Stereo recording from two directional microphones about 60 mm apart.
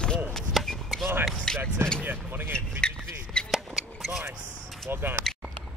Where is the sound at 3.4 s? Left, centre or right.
Centre.